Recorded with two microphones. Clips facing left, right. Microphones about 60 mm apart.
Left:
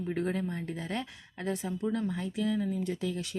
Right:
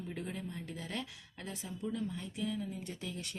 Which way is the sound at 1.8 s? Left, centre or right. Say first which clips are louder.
Left 4 dB; left.